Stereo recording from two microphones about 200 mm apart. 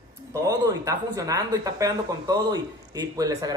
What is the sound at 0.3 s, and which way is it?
A woman's voice, 15° right (ahead or behind).